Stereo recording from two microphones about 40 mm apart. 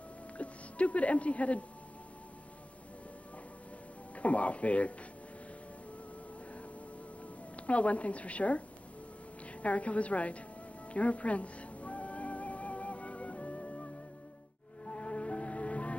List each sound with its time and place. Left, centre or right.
0.4 s speech: left
4.1 s a sound: left
7.5 s a woman's voice: left
10.9 s music: left
14.9 s music: left